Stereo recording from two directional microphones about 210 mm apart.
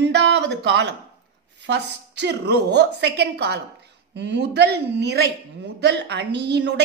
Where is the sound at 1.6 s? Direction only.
55° right (ahead or behind).